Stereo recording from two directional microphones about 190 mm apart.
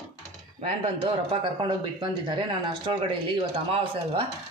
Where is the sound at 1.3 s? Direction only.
25° right (ahead or behind).